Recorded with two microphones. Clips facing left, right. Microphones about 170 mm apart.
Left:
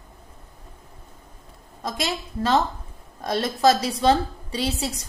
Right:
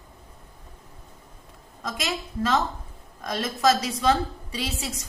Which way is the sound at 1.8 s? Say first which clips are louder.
Left 3 dB; 35° left (ahead or behind).